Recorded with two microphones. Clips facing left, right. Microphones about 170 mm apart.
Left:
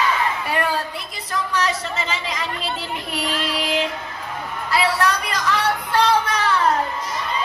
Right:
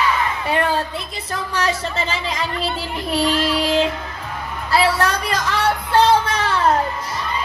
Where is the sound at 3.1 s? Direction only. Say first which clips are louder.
Right 7 dB; 30° right (ahead or behind).